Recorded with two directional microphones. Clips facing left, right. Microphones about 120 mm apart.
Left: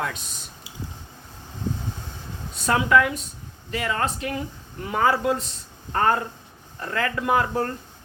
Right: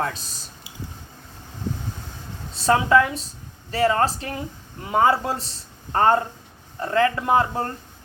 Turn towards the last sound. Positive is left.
turn(degrees=-25)  # may be behind; listen again after turning